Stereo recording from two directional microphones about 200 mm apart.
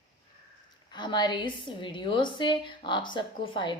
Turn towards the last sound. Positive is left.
turn(degrees=25)  # may be behind; listen again after turning